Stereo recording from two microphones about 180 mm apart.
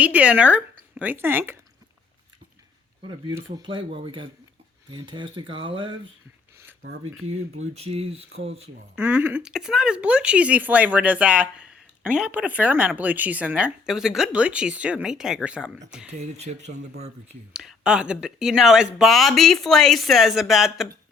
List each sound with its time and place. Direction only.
0.0 s speech: 5° right (ahead or behind)
3.0 s speech: 25° right (ahead or behind)
7.7 s speech: 35° right (ahead or behind)
9.0 s speech: 10° right (ahead or behind)
16.0 s speech: 40° right (ahead or behind)
17.5 s speech: 5° right (ahead or behind)